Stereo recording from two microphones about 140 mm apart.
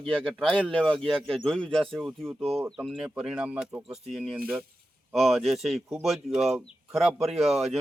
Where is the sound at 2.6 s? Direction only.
5° right (ahead or behind).